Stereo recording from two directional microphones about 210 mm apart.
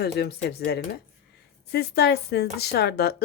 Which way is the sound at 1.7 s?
50° left (ahead or behind).